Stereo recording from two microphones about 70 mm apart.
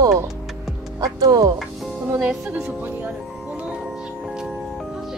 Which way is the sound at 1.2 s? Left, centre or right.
Right.